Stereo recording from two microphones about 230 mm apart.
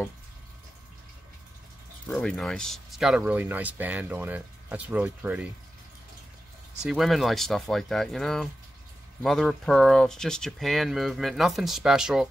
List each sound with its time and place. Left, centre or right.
2.0 s speech: centre
6.8 s speech: centre